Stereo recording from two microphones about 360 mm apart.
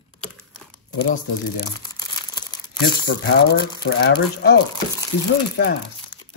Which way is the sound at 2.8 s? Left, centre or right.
Left.